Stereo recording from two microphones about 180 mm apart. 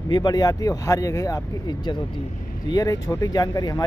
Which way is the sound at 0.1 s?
20° left (ahead or behind).